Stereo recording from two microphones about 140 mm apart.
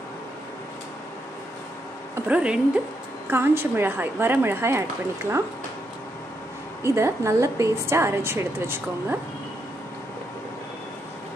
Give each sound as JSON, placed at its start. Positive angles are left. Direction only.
{"t": 2.2, "sound": "a woman's voice", "side_deg": -10}
{"t": 6.8, "sound": "a woman's voice", "side_deg": -20}